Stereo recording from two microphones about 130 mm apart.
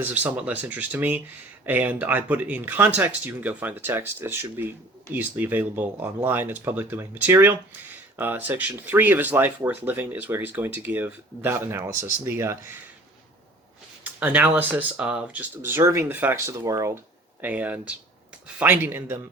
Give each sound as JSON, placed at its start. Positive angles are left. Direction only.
{"t": 0.0, "sound": "speech", "side_deg": -10}
{"t": 14.0, "sound": "speech", "side_deg": -15}
{"t": 17.4, "sound": "speech", "side_deg": -10}